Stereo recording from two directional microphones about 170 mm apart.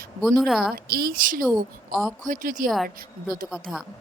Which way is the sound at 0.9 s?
65° right (ahead or behind).